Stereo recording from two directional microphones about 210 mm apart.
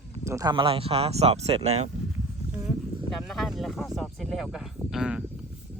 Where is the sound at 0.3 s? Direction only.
15° right (ahead or behind).